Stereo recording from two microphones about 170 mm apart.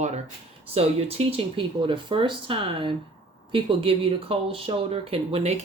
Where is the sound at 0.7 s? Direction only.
35° right (ahead or behind).